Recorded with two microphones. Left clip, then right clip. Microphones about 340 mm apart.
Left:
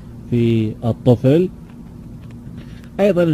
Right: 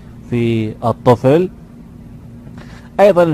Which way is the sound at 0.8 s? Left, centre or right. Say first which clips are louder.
Right 6 dB; right.